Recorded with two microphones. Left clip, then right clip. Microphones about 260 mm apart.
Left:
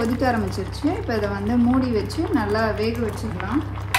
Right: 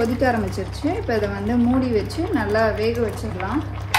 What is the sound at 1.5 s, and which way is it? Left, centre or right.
Speech, centre.